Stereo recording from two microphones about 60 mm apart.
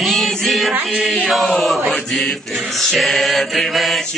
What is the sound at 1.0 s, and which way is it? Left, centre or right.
Chant, centre.